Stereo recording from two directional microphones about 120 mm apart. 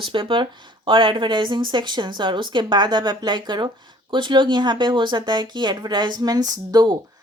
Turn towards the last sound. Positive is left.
turn(degrees=-35)  # may be behind; listen again after turning